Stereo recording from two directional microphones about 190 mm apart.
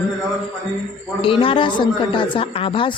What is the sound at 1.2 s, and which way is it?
A woman's voice, 30° left (ahead or behind).